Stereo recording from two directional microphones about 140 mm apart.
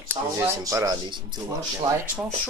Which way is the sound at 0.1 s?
20° right (ahead or behind).